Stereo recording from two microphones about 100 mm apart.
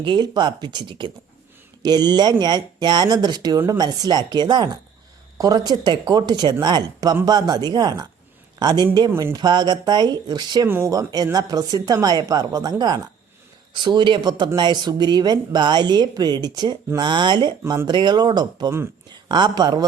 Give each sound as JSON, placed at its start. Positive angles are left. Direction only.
{"t": 0.0, "sound": "a man's voice", "side_deg": -50}
{"t": 9.4, "sound": "a woman's voice", "side_deg": -45}
{"t": 13.7, "sound": "speech", "side_deg": -50}